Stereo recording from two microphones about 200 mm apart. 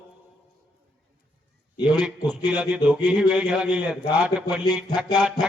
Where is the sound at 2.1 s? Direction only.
20° left (ahead or behind).